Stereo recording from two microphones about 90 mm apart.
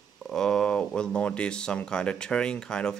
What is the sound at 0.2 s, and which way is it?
Speech, 5° left (ahead or behind).